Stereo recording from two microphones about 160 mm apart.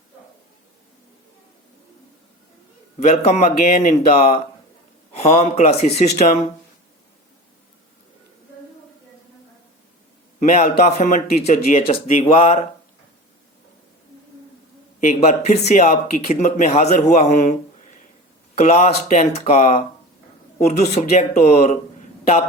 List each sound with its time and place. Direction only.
3.0 s speech: 45° left (ahead or behind)
10.4 s speech: 45° left (ahead or behind)
15.0 s speech: 50° left (ahead or behind)